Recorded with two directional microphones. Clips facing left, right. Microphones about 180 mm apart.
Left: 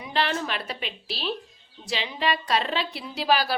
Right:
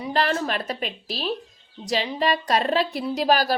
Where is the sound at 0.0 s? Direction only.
40° right (ahead or behind).